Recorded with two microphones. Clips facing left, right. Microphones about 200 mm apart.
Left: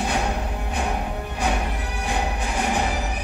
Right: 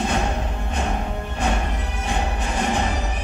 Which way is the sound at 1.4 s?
15° left (ahead or behind).